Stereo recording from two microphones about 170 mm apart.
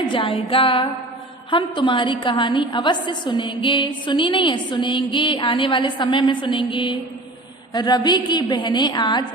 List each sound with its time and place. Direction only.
0.1 s music: 30° left (ahead or behind)
1.5 s a woman's voice: 30° left (ahead or behind)